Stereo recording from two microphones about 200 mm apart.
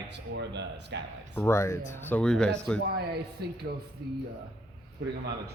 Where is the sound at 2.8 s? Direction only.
55° right (ahead or behind).